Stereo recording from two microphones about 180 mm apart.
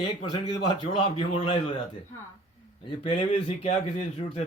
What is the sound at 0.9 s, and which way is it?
Speech, 30° left (ahead or behind).